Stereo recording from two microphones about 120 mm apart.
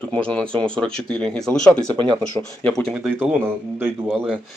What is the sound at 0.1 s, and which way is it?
Speech, 10° left (ahead or behind).